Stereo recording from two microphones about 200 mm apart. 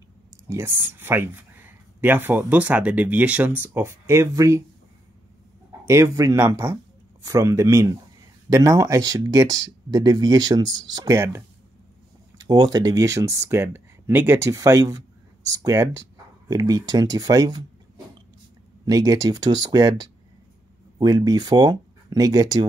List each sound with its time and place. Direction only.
0.5 s speech: 10° right (ahead or behind)
5.9 s speech: 15° right (ahead or behind)
18.9 s speech: 20° right (ahead or behind)